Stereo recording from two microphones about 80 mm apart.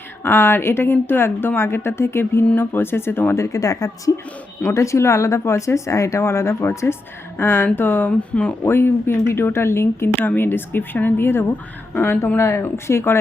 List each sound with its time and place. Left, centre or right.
0.2 s speech: left